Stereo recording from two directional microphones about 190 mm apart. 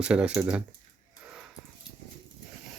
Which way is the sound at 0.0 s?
5° right (ahead or behind).